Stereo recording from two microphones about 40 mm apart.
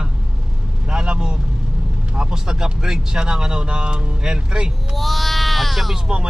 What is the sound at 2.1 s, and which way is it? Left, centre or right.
Speech, centre.